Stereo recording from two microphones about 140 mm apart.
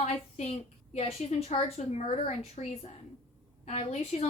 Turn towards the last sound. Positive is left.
turn(degrees=50)  # may be behind; listen again after turning